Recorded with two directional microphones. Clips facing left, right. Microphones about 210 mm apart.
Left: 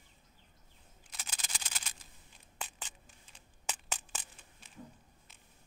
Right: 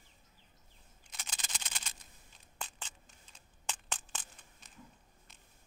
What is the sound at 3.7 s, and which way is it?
Crushing, 5° left (ahead or behind).